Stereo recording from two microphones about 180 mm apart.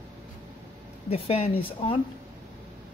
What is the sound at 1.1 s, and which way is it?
Speech, 35° left (ahead or behind).